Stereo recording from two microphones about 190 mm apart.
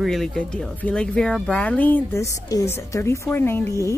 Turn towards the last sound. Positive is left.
turn(degrees=15)  # may be behind; listen again after turning